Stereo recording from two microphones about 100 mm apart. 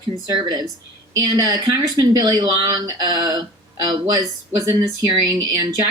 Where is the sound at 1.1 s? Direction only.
40° right (ahead or behind).